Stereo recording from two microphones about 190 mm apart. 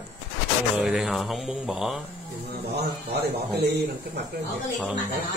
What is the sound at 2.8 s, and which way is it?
Speech, 55° right (ahead or behind).